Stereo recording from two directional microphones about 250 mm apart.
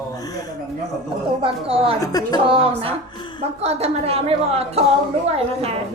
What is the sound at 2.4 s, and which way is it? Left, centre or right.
A woman's voice, right.